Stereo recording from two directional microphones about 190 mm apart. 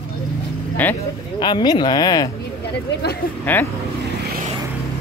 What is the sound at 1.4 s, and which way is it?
Speech, 20° left (ahead or behind).